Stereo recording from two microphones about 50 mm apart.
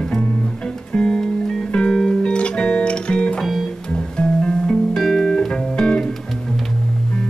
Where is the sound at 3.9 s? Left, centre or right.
Centre.